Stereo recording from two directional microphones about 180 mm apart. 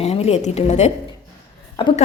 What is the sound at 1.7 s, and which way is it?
Speech, 25° left (ahead or behind).